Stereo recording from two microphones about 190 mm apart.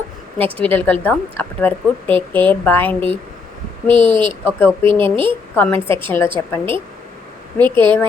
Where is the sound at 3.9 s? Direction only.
25° right (ahead or behind).